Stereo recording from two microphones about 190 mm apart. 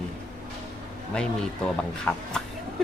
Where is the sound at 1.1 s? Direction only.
5° left (ahead or behind).